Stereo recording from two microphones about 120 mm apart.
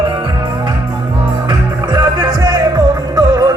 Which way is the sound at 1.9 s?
35° right (ahead or behind).